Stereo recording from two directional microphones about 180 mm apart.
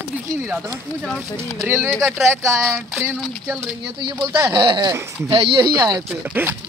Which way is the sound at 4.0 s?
25° right (ahead or behind).